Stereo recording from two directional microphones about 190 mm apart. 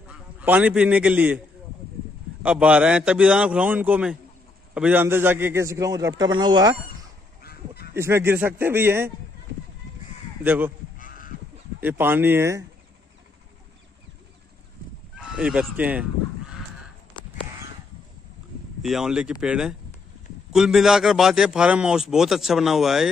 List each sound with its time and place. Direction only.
0.1 s a man's voice: 5° right (ahead or behind)
2.4 s a man's voice: 5° right (ahead or behind)
7.4 s honk: 55° left (ahead or behind)
7.9 s a man's voice: 15° right (ahead or behind)
10.4 s a man's voice: 10° right (ahead or behind)
11.8 s a man's voice: 10° right (ahead or behind)
15.1 s goose: 5° right (ahead or behind)
18.8 s a man's voice: centre (ahead or behind)